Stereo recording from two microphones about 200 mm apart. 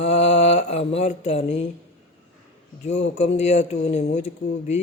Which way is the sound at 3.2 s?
35° left (ahead or behind).